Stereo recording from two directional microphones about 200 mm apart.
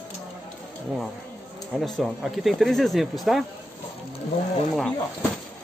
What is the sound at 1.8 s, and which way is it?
Speech, centre (ahead or behind).